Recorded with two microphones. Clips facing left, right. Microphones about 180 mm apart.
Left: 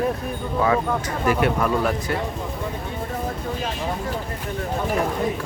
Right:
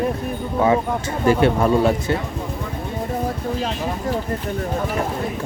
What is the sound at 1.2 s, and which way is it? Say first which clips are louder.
Speech: right 5 dB; 30° right (ahead or behind).